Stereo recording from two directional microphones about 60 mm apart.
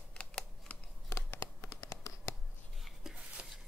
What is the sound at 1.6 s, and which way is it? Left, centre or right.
Hands, left.